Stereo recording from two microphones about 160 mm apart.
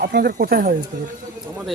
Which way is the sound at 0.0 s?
75° right (ahead or behind).